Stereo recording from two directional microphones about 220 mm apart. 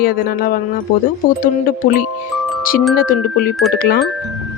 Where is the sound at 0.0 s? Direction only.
40° left (ahead or behind).